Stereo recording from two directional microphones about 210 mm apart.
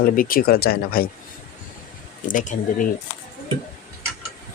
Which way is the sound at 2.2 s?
35° left (ahead or behind).